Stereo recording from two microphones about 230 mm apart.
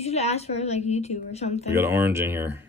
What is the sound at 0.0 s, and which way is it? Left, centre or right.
A woman's voice, left.